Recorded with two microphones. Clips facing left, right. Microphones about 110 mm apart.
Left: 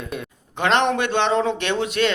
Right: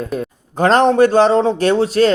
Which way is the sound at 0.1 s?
40° right (ahead or behind).